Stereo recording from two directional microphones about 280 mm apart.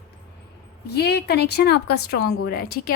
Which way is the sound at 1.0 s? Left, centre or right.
Left.